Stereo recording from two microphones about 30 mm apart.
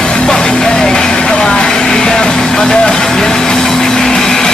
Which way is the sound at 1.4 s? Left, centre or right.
Left.